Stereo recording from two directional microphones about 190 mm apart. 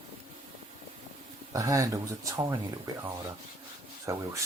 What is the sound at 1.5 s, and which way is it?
Speech, 15° right (ahead or behind).